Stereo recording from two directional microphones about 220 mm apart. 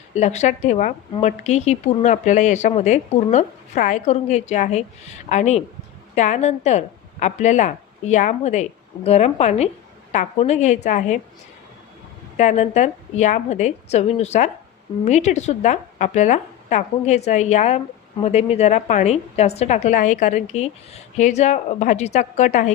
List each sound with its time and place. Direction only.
0.1 s a woman's voice: 30° left (ahead or behind)
12.4 s a woman's voice: 30° left (ahead or behind)